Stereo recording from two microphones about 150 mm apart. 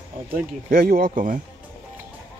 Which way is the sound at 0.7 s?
80° right.